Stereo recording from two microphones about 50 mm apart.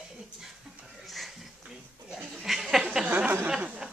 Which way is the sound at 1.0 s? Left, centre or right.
Centre.